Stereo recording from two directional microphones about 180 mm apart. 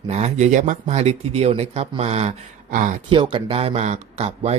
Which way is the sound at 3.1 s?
30° right (ahead or behind).